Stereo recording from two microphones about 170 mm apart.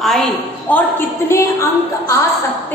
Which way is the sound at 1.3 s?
15° left (ahead or behind).